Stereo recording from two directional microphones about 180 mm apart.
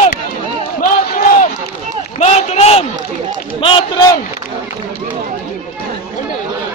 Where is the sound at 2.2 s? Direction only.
35° left (ahead or behind).